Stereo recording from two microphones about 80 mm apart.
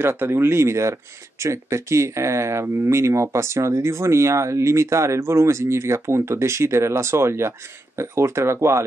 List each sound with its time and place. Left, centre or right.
0.0 s speech: right